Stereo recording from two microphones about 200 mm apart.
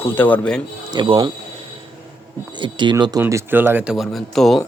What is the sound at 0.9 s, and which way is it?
Speech, 20° right (ahead or behind).